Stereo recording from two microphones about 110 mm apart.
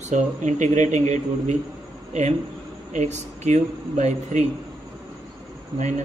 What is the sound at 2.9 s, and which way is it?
Speech, 90° right.